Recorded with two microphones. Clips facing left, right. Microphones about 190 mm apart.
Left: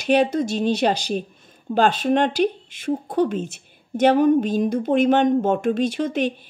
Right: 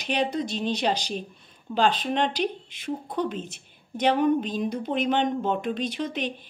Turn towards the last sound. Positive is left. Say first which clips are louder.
# left 7 dB
turn(degrees=50)  # may be behind; listen again after turning